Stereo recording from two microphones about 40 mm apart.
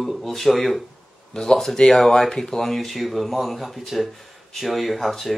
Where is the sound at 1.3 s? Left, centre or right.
Centre.